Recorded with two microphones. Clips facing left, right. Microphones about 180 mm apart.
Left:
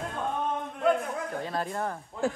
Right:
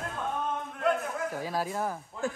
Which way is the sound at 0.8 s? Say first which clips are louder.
Left 2 dB; centre (ahead or behind).